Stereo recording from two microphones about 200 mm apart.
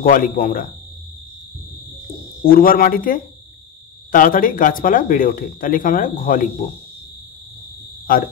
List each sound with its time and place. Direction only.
0.0 s speech: 45° left (ahead or behind)
2.4 s speech: 45° left (ahead or behind)